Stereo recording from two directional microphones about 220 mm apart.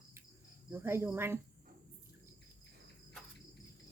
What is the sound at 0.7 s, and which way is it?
Speech, 10° right (ahead or behind).